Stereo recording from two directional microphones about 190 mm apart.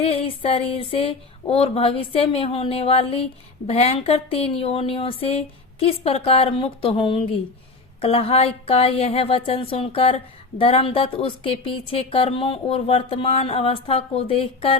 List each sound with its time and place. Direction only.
0.0 s speech: 30° left (ahead or behind)